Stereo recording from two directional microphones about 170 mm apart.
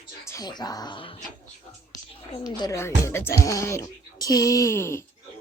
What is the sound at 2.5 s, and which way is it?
Speech, 20° left (ahead or behind).